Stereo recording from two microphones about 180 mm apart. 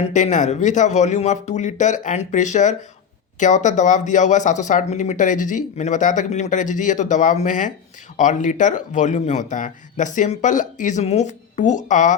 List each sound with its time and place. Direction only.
0.0 s speech: 40° left (ahead or behind)